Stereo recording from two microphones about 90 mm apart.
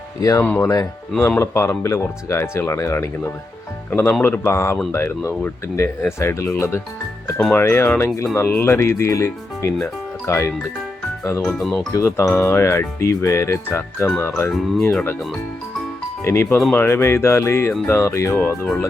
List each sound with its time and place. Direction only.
0.2 s speech: 40° left (ahead or behind)
0.4 s speech: 20° left (ahead or behind)
1.4 s speech: 30° left (ahead or behind)
11.4 s speech: 10° left (ahead or behind)
11.9 s speech: 35° left (ahead or behind)
16.2 s speech: 30° left (ahead or behind)
18.4 s speech: 20° left (ahead or behind)